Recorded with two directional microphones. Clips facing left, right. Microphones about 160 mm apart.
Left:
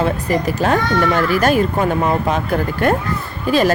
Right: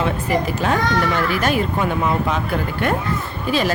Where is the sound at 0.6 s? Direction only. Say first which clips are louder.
Left 3 dB; 40° left (ahead or behind).